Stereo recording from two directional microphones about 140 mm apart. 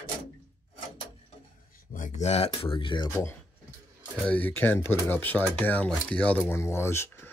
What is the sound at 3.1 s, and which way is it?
Speech, 20° left (ahead or behind).